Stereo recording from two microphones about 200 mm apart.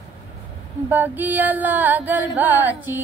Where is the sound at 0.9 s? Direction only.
10° right (ahead or behind).